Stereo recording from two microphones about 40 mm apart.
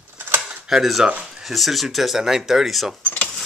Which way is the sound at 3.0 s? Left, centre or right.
Left.